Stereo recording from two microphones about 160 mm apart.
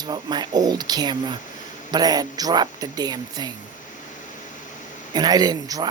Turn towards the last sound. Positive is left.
turn(degrees=-25)  # may be behind; listen again after turning